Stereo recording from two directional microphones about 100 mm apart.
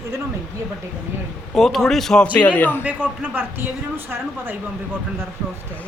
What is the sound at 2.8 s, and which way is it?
Speech, 15° right (ahead or behind).